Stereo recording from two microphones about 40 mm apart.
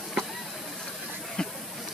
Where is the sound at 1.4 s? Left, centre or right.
Left.